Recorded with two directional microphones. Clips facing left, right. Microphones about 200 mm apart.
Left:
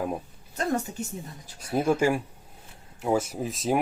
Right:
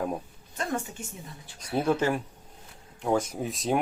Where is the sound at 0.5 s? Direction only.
40° left (ahead or behind).